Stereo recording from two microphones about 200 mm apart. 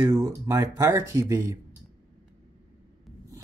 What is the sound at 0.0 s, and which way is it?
Speech, 15° right (ahead or behind).